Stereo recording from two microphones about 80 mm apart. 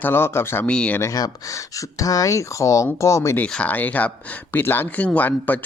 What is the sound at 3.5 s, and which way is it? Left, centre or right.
Speech, centre.